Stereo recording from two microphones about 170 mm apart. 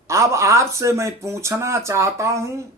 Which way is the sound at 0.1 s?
15° right (ahead or behind).